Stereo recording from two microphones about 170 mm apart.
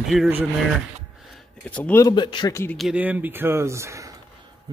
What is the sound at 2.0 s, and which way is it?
Speech, 25° left (ahead or behind).